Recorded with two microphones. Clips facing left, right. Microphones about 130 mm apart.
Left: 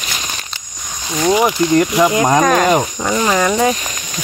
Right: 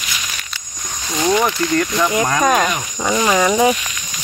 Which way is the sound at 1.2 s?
20° left (ahead or behind).